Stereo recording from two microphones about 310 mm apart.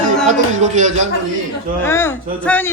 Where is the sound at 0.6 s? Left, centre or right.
Right.